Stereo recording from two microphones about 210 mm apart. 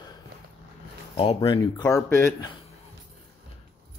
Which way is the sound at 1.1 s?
30° left (ahead or behind).